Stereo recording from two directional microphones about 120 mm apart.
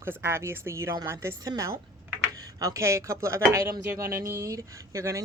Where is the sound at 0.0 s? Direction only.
20° right (ahead or behind).